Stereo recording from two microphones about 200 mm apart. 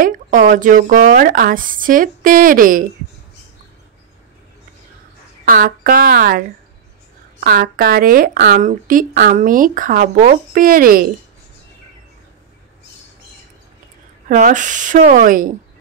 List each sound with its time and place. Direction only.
0.0 s speech: 40° right (ahead or behind)
5.5 s speech: 45° right (ahead or behind)
14.3 s speech: 40° right (ahead or behind)